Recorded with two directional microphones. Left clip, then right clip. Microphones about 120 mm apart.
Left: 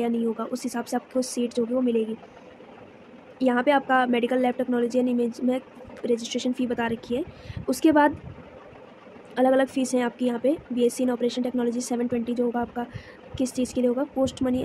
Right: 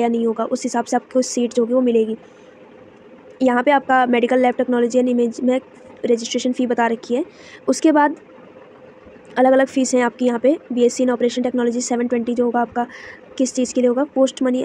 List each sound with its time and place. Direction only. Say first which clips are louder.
0.0 s speech: right 8 dB; 25° right (ahead or behind)
3.3 s speech: right 6 dB; 25° right (ahead or behind)
9.3 s speech: right 7 dB; 25° right (ahead or behind)